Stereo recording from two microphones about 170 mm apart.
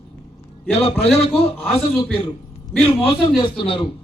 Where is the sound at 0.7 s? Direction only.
35° left (ahead or behind).